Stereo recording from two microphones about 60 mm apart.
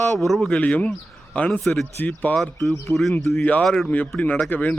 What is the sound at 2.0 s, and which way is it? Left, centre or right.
Speech, left.